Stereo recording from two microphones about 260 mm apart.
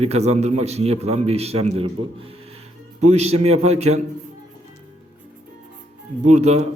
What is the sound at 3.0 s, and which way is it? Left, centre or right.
A man's voice, right.